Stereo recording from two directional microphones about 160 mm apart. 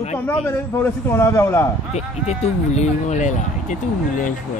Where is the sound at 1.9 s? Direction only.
45° left (ahead or behind).